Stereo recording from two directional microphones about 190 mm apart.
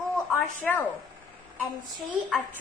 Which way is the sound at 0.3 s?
5° left (ahead or behind).